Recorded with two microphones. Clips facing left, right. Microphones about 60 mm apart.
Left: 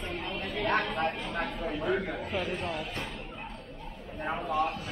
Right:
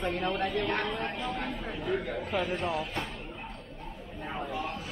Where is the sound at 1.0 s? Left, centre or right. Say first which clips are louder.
Left 1 dB; centre.